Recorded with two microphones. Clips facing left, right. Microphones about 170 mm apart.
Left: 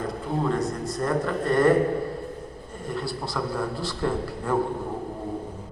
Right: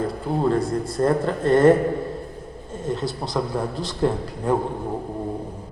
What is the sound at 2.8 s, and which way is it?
A man's voice, 20° right (ahead or behind).